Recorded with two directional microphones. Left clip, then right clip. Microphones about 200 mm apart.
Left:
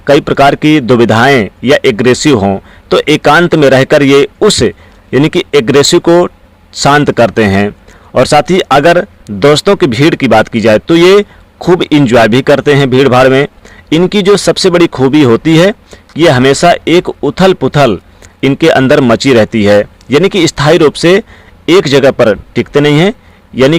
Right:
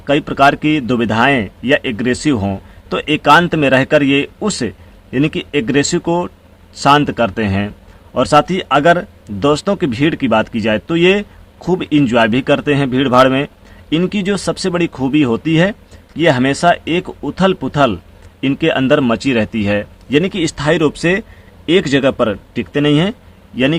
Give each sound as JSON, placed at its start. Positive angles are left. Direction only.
{"t": 0.0, "sound": "speech", "side_deg": 40}